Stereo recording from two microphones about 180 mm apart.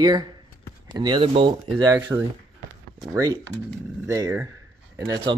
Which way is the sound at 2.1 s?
10° right (ahead or behind).